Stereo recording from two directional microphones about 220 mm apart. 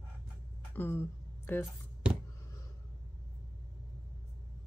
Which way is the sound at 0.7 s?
10° left (ahead or behind).